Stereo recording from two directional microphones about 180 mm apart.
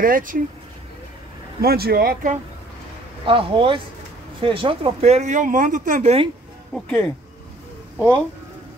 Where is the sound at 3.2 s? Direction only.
30° right (ahead or behind); by 6.1 s 45° right (ahead or behind).